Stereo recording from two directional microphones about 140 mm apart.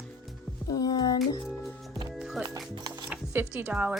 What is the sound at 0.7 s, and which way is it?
Music, 25° left (ahead or behind).